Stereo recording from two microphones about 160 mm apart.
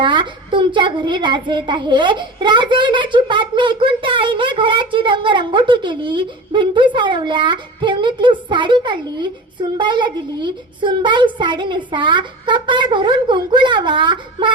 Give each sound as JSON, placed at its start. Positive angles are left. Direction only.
{"t": 0.0, "sound": "a child's voice", "side_deg": -30}